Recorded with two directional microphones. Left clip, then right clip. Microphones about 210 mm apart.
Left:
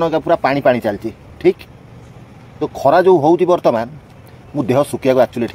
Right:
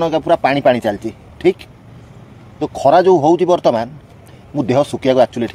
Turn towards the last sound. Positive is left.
turn(degrees=0)  # may be behind; listen again after turning